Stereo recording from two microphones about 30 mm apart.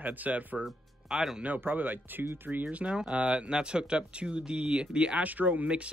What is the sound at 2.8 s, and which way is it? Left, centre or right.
Speech, right.